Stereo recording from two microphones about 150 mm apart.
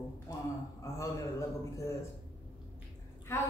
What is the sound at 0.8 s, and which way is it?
A man's voice, 20° left (ahead or behind).